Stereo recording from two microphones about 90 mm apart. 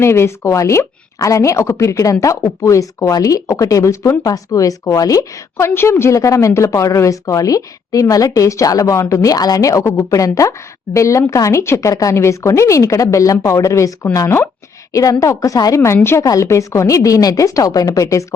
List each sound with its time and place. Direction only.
0.0 s a woman's voice: 30° left (ahead or behind)